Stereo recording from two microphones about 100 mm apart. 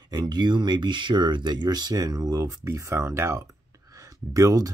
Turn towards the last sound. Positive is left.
turn(degrees=-35)  # may be behind; listen again after turning